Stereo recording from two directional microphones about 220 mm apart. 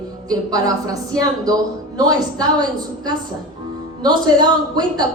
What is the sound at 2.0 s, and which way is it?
A woman's voice, 15° right (ahead or behind).